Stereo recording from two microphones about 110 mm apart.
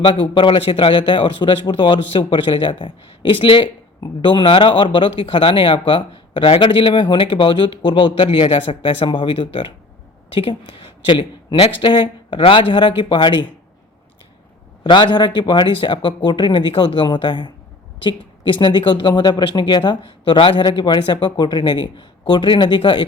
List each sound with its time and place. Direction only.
0.0 s a woman's voice: 50° left (ahead or behind)
11.5 s speech: 60° left (ahead or behind); by 13.5 s 45° left (ahead or behind)
14.8 s speech: 45° left (ahead or behind)
18.6 s speech: 45° left (ahead or behind)